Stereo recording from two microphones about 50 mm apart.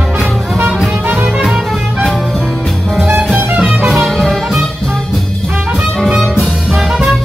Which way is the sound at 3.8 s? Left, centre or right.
Centre.